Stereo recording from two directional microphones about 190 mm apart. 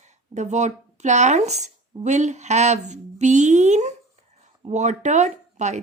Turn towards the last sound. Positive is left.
turn(degrees=-40)  # may be behind; listen again after turning